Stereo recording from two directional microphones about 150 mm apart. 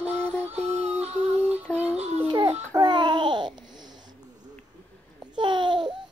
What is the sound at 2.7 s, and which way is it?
Babbling, 30° right (ahead or behind).